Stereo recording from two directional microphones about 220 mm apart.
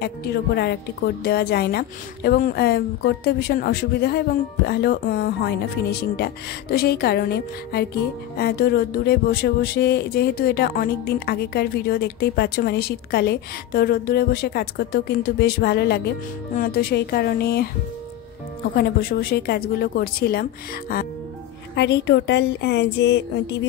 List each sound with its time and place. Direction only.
0.6 s speech: 45° left (ahead or behind)
18.8 s speech: 45° left (ahead or behind)